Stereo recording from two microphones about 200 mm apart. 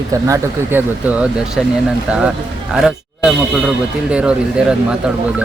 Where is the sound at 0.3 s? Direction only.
10° right (ahead or behind).